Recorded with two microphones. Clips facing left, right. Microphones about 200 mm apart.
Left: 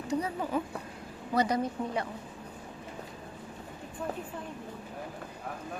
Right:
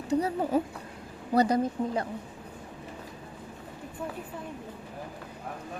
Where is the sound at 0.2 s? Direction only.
40° right (ahead or behind).